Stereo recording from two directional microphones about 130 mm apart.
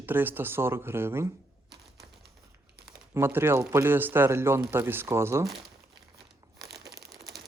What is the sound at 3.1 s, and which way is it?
Speech, 20° right (ahead or behind).